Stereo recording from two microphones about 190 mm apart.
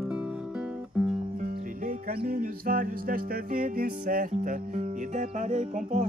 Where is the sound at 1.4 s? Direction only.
50° right (ahead or behind).